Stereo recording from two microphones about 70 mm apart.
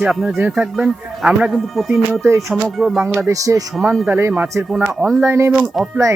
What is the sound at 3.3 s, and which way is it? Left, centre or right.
Speech, right.